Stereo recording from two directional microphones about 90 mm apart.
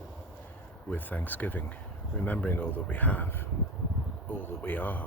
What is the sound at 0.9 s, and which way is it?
Speech, 20° left (ahead or behind).